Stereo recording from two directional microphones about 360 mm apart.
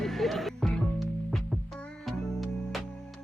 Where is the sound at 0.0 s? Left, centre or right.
Centre.